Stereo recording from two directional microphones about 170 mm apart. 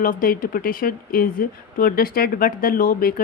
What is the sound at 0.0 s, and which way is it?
Speech, 55° left (ahead or behind).